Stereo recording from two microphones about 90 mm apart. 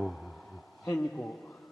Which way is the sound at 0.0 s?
5° left (ahead or behind).